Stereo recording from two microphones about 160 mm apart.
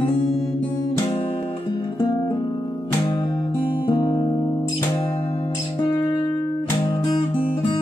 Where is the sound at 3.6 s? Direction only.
30° left (ahead or behind).